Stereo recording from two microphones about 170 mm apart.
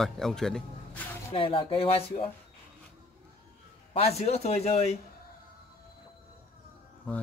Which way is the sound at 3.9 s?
35° left (ahead or behind).